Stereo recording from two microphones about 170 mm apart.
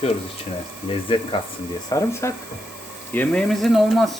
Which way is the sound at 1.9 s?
15° left (ahead or behind).